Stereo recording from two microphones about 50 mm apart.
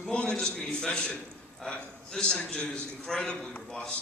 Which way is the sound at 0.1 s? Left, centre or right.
Centre.